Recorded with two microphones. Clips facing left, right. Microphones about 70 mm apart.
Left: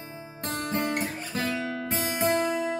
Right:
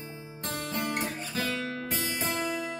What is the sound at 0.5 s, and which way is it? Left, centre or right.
Guitar, left.